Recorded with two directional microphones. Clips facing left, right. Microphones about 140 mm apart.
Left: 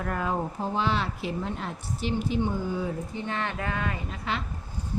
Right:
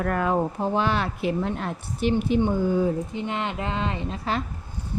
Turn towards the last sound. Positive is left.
turn(degrees=-35)  # may be behind; listen again after turning